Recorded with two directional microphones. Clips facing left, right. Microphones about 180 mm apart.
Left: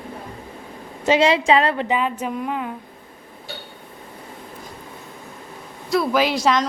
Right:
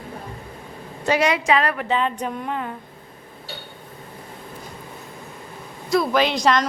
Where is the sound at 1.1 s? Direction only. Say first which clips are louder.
Left 3 dB; 25° left (ahead or behind).